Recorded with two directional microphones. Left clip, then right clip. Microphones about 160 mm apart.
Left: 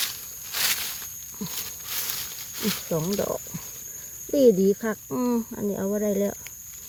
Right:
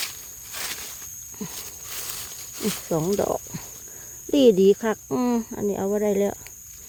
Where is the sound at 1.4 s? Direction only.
20° right (ahead or behind).